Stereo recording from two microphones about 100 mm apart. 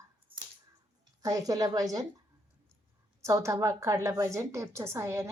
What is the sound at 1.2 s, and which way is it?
Speech, 40° right (ahead or behind).